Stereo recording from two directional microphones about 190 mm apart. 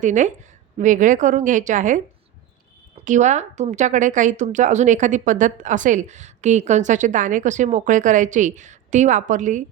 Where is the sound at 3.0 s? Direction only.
40° right (ahead or behind).